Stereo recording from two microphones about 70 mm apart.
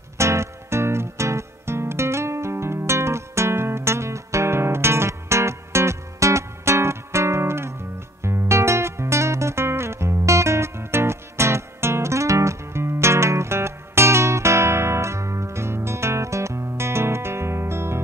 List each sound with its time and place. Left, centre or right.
0.2 s music: right